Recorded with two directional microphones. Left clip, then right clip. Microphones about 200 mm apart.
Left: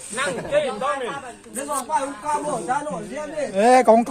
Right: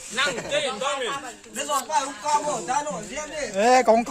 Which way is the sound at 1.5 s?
45° right (ahead or behind).